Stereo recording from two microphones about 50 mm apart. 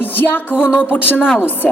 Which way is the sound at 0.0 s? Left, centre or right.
Left.